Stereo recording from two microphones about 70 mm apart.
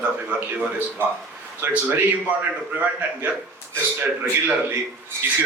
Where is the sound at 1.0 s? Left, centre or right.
Right.